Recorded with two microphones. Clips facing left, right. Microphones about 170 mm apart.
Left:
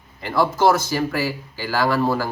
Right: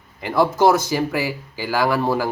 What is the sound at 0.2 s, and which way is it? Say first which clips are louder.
Speech: right 2 dB; 15° right (ahead or behind).